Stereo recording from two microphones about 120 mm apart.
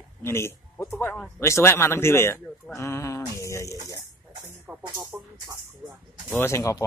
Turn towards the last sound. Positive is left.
turn(degrees=25)  # may be behind; listen again after turning